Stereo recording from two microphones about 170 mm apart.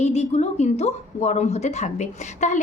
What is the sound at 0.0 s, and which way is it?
A woman's voice, 40° left (ahead or behind).